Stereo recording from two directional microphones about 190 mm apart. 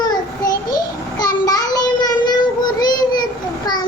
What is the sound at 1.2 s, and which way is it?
Child singing, 20° left (ahead or behind).